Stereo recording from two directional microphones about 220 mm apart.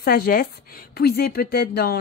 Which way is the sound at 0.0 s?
40° left (ahead or behind).